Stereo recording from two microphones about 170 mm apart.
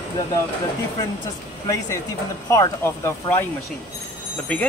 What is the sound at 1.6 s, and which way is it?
Speech, 20° left (ahead or behind).